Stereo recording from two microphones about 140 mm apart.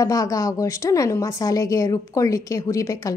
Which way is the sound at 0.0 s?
25° left (ahead or behind).